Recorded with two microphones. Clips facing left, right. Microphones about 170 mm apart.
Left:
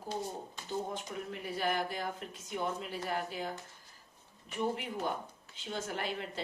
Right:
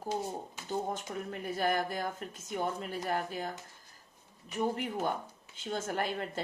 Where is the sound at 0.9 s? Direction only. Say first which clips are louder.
Right 2 dB; 45° right (ahead or behind).